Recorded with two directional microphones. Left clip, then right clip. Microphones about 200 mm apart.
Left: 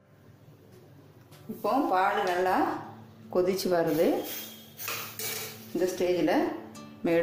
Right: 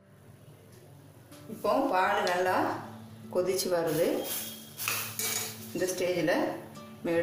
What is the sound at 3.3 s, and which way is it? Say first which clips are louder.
Speech: left 2 dB; 30° left (ahead or behind).